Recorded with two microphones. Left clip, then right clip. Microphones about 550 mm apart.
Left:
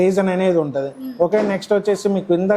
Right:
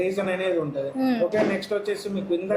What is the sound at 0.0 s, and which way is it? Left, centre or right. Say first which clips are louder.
Speech: left 8 dB; left.